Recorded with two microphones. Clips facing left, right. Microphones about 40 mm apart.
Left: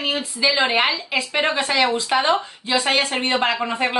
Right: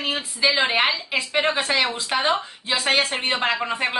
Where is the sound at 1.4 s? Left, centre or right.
Centre.